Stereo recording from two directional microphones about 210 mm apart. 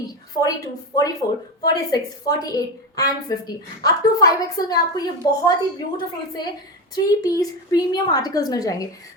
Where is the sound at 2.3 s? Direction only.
15° left (ahead or behind).